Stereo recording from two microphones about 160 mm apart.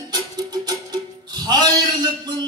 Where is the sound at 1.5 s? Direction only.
25° right (ahead or behind).